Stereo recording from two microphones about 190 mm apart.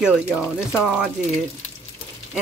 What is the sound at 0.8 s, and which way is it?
Speech, 5° right (ahead or behind).